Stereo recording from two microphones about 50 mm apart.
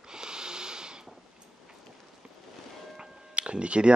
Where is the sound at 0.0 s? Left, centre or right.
Centre.